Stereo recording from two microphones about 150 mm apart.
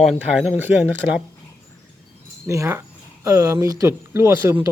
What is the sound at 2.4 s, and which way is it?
Speech, 20° right (ahead or behind).